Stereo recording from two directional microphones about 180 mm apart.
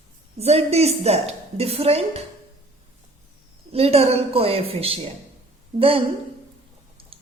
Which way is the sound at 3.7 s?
35° right (ahead or behind).